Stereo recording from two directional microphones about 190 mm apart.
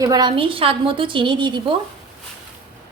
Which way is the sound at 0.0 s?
20° right (ahead or behind).